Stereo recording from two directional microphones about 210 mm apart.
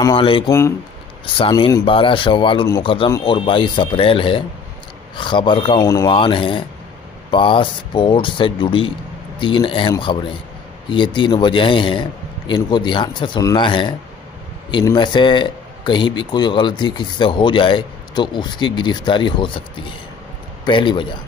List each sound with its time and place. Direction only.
0.0 s speech: 25° left (ahead or behind)
20.6 s speech: 20° left (ahead or behind)